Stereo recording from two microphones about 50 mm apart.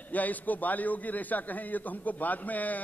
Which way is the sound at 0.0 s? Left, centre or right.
Left.